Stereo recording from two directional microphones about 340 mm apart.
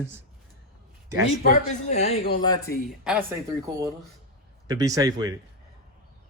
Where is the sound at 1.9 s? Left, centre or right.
Centre.